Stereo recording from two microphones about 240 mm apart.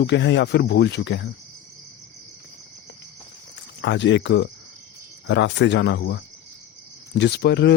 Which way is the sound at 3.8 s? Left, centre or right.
Left.